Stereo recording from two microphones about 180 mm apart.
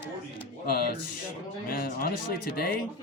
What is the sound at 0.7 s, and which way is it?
Speech, 55° left (ahead or behind).